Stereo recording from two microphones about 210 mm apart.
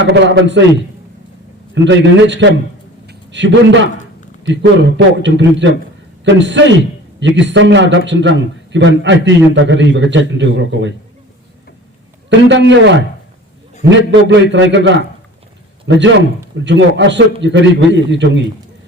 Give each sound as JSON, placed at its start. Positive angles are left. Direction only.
{"t": 0.0, "sound": "a man's voice", "side_deg": -60}
{"t": 1.7, "sound": "a man's voice", "side_deg": -60}
{"t": 12.3, "sound": "a man's voice", "side_deg": -60}